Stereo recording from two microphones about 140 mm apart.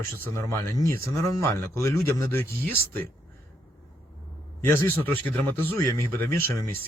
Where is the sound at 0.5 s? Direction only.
20° left (ahead or behind).